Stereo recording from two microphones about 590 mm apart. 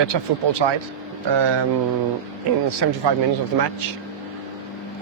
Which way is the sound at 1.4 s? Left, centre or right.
Right.